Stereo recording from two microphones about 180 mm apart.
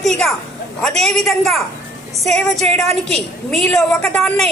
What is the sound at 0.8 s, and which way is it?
Speech, centre (ahead or behind).